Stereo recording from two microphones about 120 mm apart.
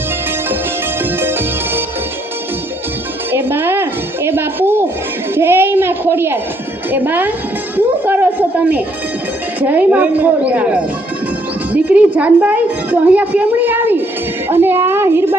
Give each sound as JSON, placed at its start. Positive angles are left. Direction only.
{"t": 1.2, "sound": "music", "side_deg": -20}
{"t": 3.3, "sound": "music", "side_deg": -20}
{"t": 5.3, "sound": "a child's voice", "side_deg": -20}